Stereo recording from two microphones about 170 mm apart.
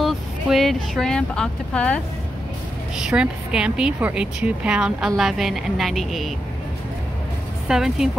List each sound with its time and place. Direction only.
0.0 s speech: centre (ahead or behind)
3.0 s a woman's voice: 5° right (ahead or behind)
7.6 s a woman's voice: 5° right (ahead or behind)